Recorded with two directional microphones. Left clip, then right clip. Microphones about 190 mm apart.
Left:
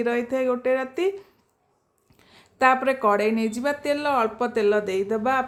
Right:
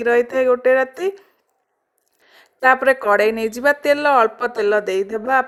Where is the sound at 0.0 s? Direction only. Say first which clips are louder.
Right 8 dB; 30° right (ahead or behind).